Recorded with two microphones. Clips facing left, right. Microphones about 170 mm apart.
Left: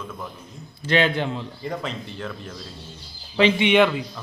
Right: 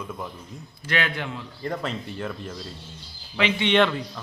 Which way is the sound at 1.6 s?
5° right (ahead or behind).